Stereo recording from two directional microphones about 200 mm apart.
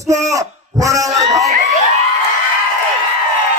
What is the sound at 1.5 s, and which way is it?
Crowd, 35° right (ahead or behind).